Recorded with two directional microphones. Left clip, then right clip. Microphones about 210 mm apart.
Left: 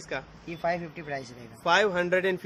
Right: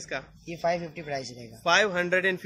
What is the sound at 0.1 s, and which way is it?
Speech, centre (ahead or behind).